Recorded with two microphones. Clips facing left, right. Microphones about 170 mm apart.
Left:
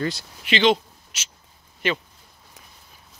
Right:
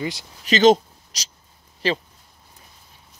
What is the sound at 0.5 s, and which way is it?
Speech, 40° right (ahead or behind).